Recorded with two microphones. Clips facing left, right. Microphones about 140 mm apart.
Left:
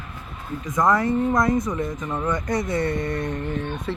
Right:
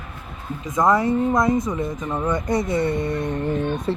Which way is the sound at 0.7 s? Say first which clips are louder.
Right 2 dB; 25° right (ahead or behind).